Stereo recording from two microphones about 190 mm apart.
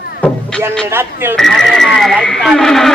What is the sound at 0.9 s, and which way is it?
Speech, 10° right (ahead or behind).